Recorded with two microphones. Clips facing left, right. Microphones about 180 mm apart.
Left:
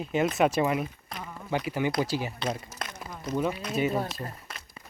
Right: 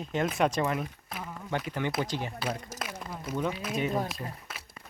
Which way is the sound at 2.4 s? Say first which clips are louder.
Left 2 dB; 5° right (ahead or behind).